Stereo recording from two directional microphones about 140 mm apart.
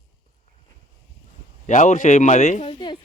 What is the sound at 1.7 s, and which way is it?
A man's voice, 60° left (ahead or behind).